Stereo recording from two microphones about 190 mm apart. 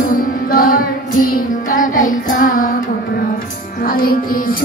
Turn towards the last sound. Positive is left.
turn(degrees=50)  # may be behind; listen again after turning